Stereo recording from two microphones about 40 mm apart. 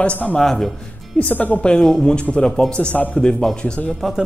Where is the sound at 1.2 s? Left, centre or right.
Left.